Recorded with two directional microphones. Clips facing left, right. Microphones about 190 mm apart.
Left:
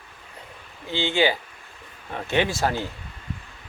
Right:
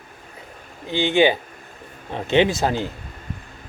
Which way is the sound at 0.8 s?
15° right (ahead or behind).